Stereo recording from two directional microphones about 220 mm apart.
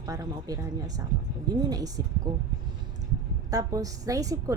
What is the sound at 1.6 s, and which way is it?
Speech, 15° right (ahead or behind).